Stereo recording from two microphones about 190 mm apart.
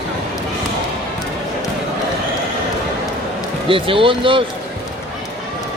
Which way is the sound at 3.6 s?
30° right (ahead or behind).